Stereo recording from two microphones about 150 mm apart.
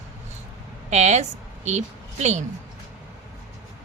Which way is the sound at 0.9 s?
50° right (ahead or behind).